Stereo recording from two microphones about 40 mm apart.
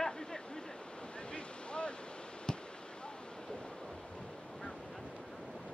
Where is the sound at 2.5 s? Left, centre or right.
Centre.